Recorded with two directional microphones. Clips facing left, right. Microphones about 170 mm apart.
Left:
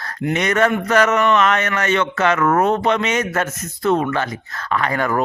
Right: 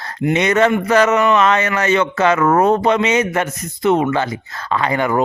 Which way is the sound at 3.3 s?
15° right (ahead or behind).